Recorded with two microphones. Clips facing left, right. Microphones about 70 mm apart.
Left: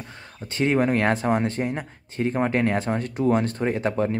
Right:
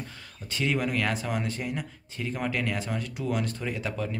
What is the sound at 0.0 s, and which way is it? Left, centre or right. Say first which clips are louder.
Speech: left 3 dB; left.